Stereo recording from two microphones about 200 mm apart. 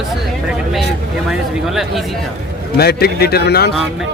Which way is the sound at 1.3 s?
Centre (ahead or behind).